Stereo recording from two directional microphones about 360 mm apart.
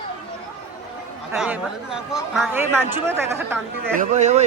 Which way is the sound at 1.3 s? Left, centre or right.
Centre.